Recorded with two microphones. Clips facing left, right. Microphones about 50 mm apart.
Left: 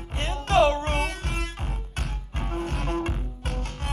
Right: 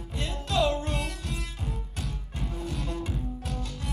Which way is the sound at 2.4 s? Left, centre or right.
Left.